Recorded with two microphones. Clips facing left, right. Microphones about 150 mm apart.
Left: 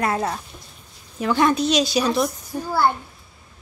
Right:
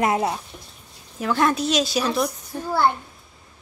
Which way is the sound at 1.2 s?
Centre (ahead or behind).